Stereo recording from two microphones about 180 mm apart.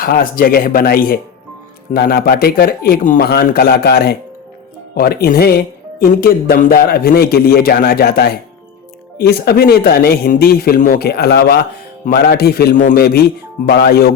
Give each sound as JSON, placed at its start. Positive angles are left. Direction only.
{"t": 0.0, "sound": "speech", "side_deg": 55}